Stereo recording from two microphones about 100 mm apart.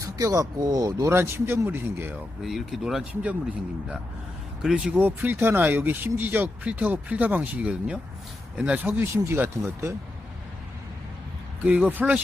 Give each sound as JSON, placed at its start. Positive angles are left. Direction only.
{"t": 0.0, "sound": "speech", "side_deg": -30}
{"t": 2.4, "sound": "speech", "side_deg": 0}
{"t": 4.6, "sound": "speech", "side_deg": -10}
{"t": 5.0, "sound": "speech", "side_deg": -20}
{"t": 11.6, "sound": "speech", "side_deg": -15}